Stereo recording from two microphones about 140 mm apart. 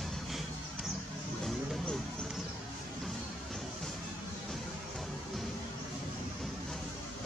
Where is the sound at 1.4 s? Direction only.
Centre (ahead or behind).